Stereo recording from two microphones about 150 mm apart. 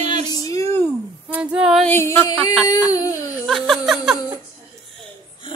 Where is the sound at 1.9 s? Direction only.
15° left (ahead or behind).